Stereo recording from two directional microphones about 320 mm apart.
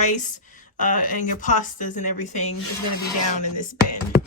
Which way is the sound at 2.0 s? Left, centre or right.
Left.